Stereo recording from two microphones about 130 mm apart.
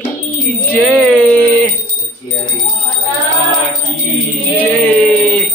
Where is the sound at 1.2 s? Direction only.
10° left (ahead or behind).